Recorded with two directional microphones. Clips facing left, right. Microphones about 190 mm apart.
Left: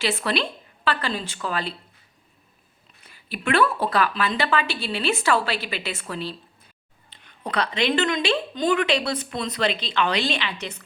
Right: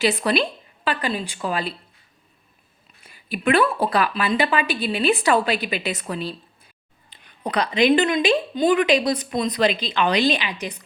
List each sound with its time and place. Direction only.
0.0 s a woman's voice: 15° right (ahead or behind)
3.1 s a woman's voice: 15° right (ahead or behind)